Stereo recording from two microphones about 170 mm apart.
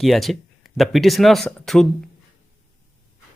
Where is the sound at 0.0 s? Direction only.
Centre (ahead or behind).